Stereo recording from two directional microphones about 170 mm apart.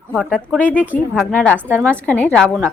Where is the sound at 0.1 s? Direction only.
10° left (ahead or behind).